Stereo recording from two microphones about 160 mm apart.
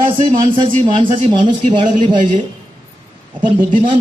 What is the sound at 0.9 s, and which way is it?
Speech, 30° right (ahead or behind).